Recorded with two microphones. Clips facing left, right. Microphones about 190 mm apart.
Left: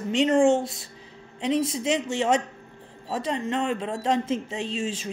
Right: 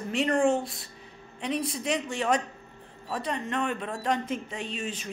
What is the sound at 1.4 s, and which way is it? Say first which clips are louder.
Speech: left 6 dB; 25° left (ahead or behind).